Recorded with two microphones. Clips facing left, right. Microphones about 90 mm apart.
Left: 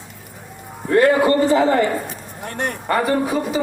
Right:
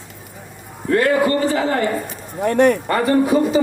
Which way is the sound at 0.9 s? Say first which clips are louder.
Left 2 dB; 20° left (ahead or behind).